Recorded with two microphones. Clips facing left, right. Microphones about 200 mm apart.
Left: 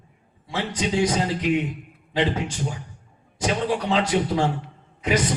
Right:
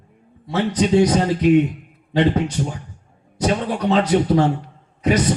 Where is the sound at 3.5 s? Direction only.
40° right (ahead or behind).